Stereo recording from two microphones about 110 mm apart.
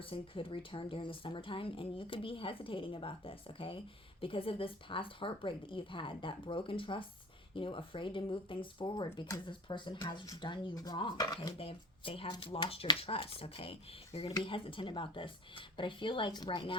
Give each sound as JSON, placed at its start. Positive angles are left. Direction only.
{"t": 0.0, "sound": "speech", "side_deg": 55}
{"t": 11.5, "sound": "speech", "side_deg": 55}
{"t": 14.4, "sound": "speech", "side_deg": 50}